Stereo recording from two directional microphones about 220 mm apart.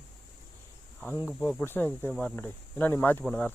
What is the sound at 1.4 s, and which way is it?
Speech, 5° left (ahead or behind).